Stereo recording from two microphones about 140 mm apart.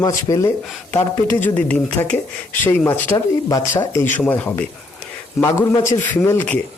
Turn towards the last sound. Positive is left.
turn(degrees=10)  # may be behind; listen again after turning